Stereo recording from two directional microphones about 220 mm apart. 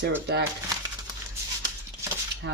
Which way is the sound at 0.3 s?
50° right (ahead or behind).